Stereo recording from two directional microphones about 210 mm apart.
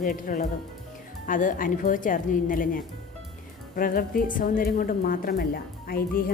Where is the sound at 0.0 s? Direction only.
40° left (ahead or behind).